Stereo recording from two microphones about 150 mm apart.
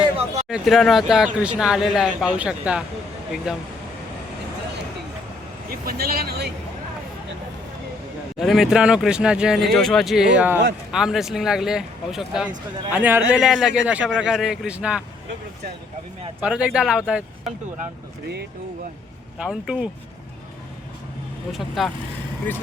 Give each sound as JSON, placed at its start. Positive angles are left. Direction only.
{"t": 0.4, "sound": "speech", "side_deg": 0}
{"t": 5.7, "sound": "speech", "side_deg": -85}
{"t": 8.4, "sound": "a man's voice", "side_deg": 0}
{"t": 16.4, "sound": "speech", "side_deg": -5}
{"t": 19.4, "sound": "speech", "side_deg": -5}
{"t": 21.5, "sound": "speech", "side_deg": 0}